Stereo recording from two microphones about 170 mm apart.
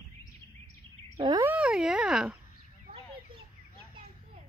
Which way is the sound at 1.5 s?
5° right (ahead or behind).